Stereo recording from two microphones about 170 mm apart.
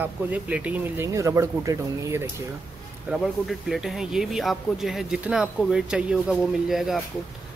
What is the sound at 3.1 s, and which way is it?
Speech, centre (ahead or behind).